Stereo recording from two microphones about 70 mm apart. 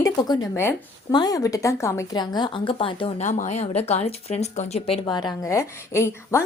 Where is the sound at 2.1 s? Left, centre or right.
Left.